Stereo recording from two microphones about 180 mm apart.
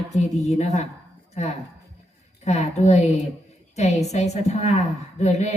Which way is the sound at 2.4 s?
40° left (ahead or behind).